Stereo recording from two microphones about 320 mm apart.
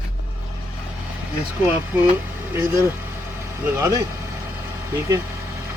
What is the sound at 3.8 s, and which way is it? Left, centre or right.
Speech, centre.